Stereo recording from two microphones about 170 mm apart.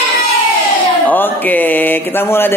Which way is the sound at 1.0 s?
10° left (ahead or behind).